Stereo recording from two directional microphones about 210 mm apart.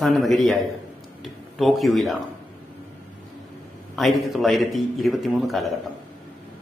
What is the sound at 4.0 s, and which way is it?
A man's voice, centre (ahead or behind).